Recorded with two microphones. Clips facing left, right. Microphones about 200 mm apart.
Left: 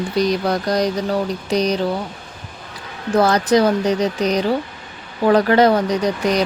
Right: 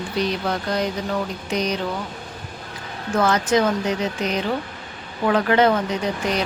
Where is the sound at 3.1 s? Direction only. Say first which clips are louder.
Left 4 dB; 35° left (ahead or behind).